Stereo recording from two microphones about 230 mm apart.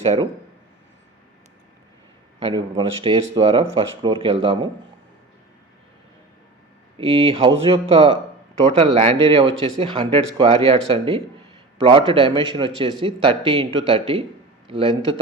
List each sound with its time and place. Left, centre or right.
0.0 s speech: right
2.4 s speech: right
7.0 s speech: right